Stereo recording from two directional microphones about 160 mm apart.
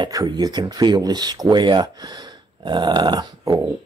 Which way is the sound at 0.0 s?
25° right (ahead or behind).